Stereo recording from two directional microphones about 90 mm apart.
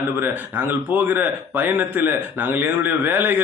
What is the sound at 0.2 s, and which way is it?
Speech, 25° right (ahead or behind).